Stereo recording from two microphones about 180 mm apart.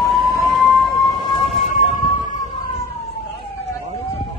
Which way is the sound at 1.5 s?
45° left (ahead or behind).